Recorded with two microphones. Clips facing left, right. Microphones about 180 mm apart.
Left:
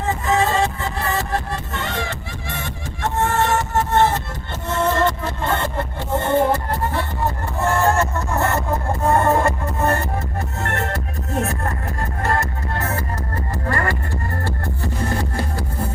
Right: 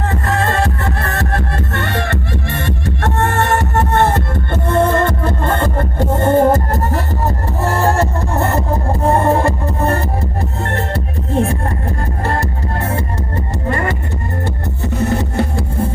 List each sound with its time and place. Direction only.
0.0 s music: 65° right (ahead or behind); by 15.9 s 25° right (ahead or behind)